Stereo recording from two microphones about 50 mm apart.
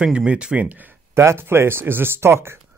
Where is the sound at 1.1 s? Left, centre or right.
Right.